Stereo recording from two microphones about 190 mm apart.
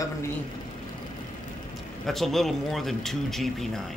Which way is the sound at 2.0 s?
Centre (ahead or behind).